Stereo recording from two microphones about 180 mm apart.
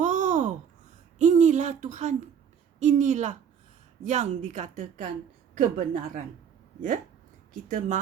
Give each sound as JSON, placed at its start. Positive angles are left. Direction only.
{"t": 0.0, "sound": "babbling", "side_deg": -45}
{"t": 1.2, "sound": "a sound", "side_deg": -40}
{"t": 2.7, "sound": "a woman's voice", "side_deg": -40}
{"t": 7.5, "sound": "a woman's voice", "side_deg": -50}